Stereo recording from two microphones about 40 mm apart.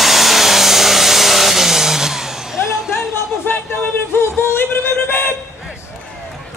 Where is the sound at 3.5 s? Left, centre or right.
Left.